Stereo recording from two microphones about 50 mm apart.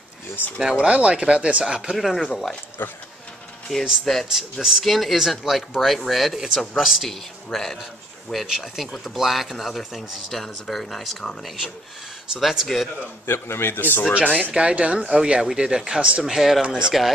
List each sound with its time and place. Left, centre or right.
0.7 s speech: right
2.0 s speech: centre
2.8 s a man's voice: left
3.7 s speech: centre
4.3 s speech: centre
7.4 s speech: centre
8.5 s speech: centre
13.3 s a man's voice: left
14.2 s speech: right
14.5 s speech: centre
16.3 s speech: centre